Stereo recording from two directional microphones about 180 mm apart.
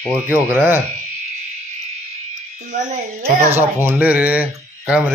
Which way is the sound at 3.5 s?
10° right (ahead or behind).